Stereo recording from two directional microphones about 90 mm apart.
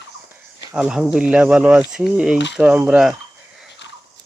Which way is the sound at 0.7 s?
10° right (ahead or behind).